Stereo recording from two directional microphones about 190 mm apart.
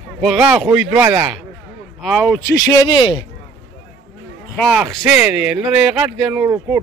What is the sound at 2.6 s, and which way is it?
Speech, 20° left (ahead or behind).